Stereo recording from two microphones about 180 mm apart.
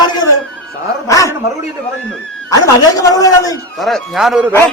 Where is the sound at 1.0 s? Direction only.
20° left (ahead or behind).